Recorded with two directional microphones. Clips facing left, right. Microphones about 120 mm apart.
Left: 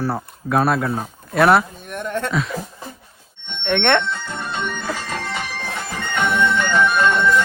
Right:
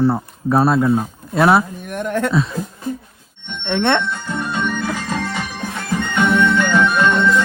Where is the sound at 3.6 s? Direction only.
20° right (ahead or behind).